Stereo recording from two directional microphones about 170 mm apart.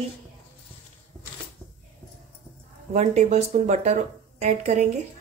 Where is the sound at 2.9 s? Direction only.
40° right (ahead or behind).